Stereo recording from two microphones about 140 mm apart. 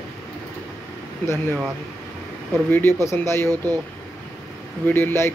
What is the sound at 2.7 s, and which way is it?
Speech, 15° left (ahead or behind).